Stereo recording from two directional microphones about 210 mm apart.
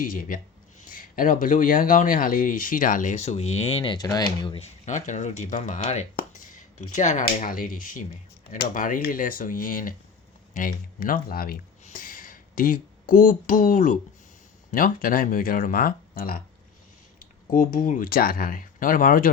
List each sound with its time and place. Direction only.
0.0 s speech: 40° left (ahead or behind); by 4.6 s 20° left (ahead or behind)
4.9 s speech: 35° left (ahead or behind)